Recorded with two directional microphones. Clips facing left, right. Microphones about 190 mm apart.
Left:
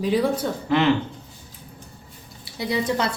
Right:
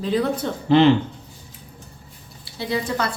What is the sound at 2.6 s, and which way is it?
Speech, 20° left (ahead or behind).